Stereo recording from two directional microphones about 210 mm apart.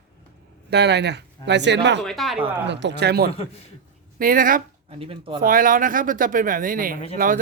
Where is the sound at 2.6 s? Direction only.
55° right (ahead or behind).